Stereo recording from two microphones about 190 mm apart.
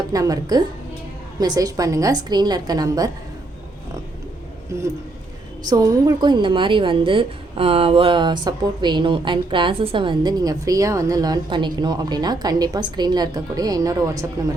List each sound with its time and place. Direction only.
0.1 s a woman's voice: 20° right (ahead or behind)
5.6 s a woman's voice: 20° right (ahead or behind)